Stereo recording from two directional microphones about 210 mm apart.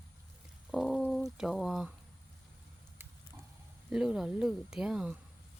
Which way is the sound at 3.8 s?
5° right (ahead or behind).